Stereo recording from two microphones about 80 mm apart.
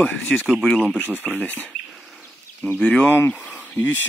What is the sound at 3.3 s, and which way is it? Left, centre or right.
Insect, centre.